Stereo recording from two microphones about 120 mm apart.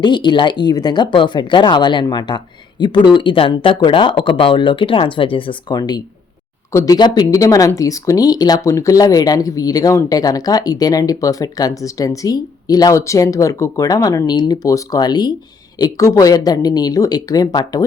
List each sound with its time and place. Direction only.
0.0 s speech: 40° left (ahead or behind)